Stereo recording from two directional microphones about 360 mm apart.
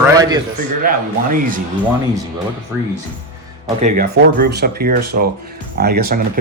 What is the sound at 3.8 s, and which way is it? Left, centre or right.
Speech, right.